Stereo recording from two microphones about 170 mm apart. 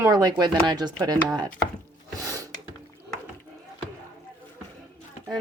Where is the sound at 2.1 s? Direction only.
20° right (ahead or behind).